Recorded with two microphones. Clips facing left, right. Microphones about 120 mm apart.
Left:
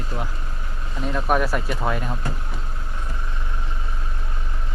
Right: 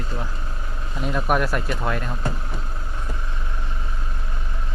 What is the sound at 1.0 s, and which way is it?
Speech, 5° right (ahead or behind).